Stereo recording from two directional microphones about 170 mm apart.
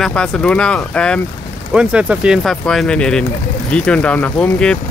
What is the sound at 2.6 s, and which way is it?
Speech, 5° left (ahead or behind).